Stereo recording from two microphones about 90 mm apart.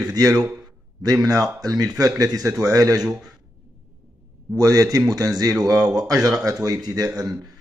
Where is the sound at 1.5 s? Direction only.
45° right (ahead or behind).